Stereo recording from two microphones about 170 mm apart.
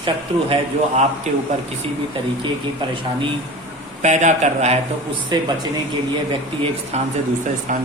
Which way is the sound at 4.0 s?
45° right (ahead or behind).